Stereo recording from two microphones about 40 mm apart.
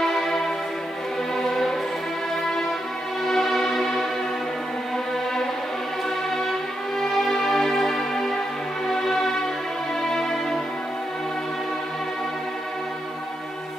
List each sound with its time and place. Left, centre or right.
0.0 s music: centre
3.3 s music: centre